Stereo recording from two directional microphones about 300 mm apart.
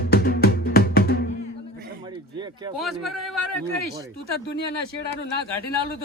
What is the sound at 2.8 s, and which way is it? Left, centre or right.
Speech, centre.